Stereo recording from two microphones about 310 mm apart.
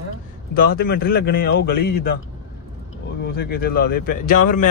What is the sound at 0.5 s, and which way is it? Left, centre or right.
Speech, left.